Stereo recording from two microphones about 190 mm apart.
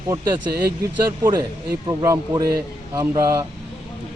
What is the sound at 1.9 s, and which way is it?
A man's voice, 20° right (ahead or behind).